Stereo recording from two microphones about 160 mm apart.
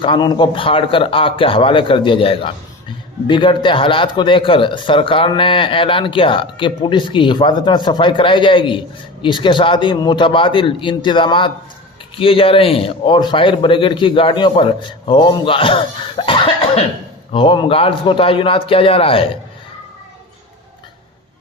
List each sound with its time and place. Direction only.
0.0 s speech: 30° left (ahead or behind)